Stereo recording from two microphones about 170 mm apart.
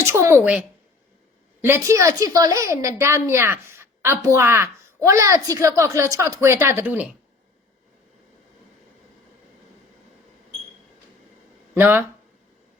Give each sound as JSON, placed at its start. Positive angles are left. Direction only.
{"t": 0.0, "sound": "a sound", "side_deg": -15}
{"t": 1.6, "sound": "a woman's voice", "side_deg": -15}
{"t": 11.7, "sound": "speech", "side_deg": -10}